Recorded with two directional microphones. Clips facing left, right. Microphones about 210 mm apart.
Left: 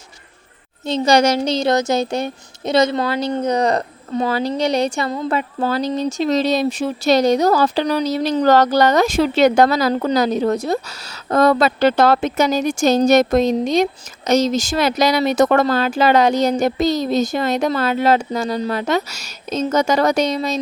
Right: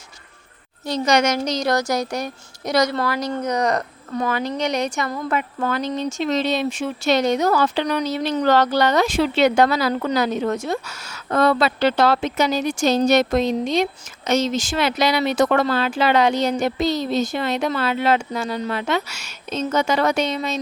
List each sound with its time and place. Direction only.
0.9 s speech: 30° left (ahead or behind)